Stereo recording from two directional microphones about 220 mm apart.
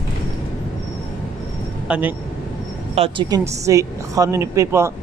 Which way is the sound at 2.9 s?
25° right (ahead or behind).